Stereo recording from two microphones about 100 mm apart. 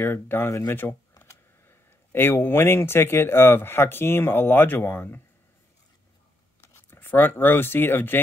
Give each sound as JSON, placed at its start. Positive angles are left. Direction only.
{"t": 0.0, "sound": "speech", "side_deg": 25}
{"t": 6.6, "sound": "speech", "side_deg": 25}